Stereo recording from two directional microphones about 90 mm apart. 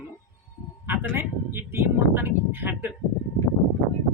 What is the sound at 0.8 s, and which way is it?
Speech, 25° right (ahead or behind).